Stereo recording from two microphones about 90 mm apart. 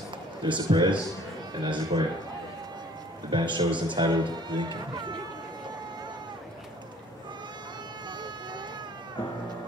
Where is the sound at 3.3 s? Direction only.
60° right (ahead or behind).